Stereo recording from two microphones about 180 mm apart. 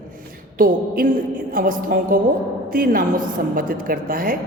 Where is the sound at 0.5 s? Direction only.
55° right (ahead or behind).